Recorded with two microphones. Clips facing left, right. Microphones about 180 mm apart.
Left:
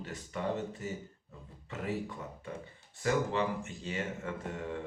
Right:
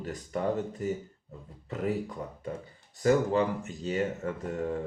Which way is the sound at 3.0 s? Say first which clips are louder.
Right 6 dB; 40° right (ahead or behind).